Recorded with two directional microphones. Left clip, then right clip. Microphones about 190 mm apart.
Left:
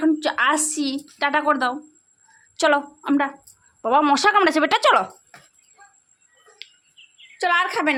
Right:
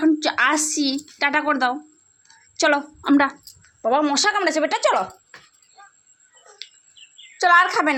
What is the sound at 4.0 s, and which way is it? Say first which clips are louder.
Speech: left 7 dB; 20° left (ahead or behind).